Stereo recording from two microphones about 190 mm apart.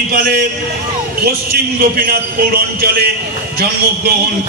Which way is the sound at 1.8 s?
50° right (ahead or behind).